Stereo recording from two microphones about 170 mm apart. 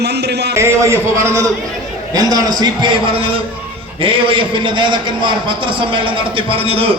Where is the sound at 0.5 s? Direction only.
15° right (ahead or behind).